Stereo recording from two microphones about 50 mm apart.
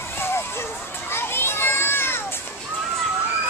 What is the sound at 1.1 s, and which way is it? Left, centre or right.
Children playing, left.